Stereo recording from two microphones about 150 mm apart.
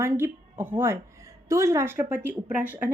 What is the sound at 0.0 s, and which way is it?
A woman's voice, 15° right (ahead or behind).